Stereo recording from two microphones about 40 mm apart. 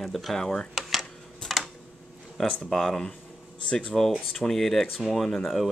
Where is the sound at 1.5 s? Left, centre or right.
Centre.